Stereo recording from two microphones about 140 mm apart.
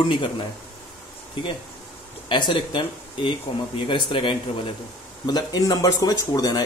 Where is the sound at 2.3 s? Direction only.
35° left (ahead or behind).